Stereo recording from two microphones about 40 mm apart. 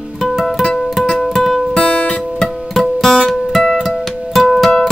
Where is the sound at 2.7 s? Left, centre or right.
Centre.